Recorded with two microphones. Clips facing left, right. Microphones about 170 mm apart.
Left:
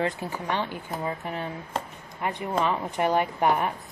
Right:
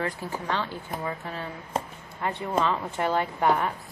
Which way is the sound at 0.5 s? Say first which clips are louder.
Left 1 dB; 15° left (ahead or behind).